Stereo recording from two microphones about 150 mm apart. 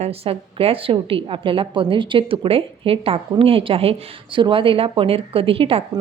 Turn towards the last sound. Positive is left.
turn(degrees=-40)  # may be behind; listen again after turning